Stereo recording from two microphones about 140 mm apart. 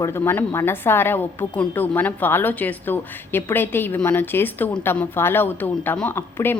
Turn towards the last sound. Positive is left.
turn(degrees=15)  # may be behind; listen again after turning